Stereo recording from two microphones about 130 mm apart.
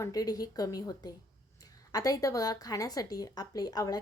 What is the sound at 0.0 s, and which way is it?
A woman's voice, 30° left (ahead or behind).